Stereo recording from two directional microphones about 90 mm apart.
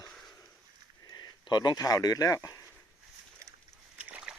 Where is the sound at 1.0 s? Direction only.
50° left (ahead or behind).